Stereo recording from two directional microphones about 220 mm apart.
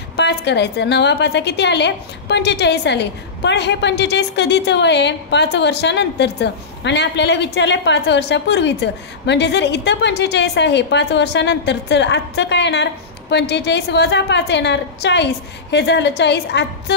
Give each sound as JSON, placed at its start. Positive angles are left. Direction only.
{"t": 0.1, "sound": "a woman's voice", "side_deg": 50}